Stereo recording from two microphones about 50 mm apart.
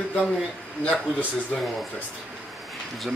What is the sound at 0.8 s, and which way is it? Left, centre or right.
Speech, left.